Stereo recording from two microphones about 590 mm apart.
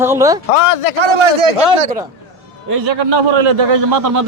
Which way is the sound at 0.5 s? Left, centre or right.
Left.